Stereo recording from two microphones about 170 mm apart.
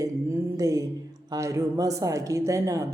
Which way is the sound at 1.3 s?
20° right (ahead or behind).